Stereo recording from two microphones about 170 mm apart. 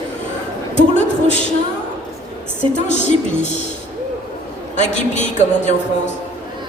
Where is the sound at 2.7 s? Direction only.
45° left (ahead or behind).